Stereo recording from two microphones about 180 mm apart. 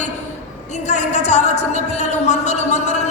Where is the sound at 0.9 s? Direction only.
40° left (ahead or behind).